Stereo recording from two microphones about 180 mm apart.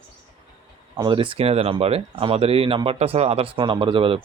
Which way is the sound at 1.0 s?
30° right (ahead or behind).